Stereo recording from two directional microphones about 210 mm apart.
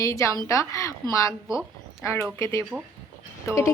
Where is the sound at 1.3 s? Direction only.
Centre (ahead or behind).